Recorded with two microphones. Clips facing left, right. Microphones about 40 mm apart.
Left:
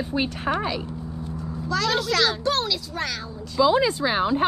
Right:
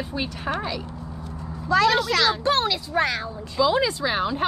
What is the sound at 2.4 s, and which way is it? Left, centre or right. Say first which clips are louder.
Speech: right 2 dB; right.